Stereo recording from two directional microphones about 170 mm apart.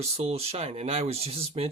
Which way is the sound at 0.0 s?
35° right (ahead or behind).